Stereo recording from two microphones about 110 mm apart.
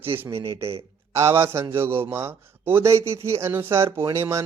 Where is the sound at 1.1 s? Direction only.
25° right (ahead or behind).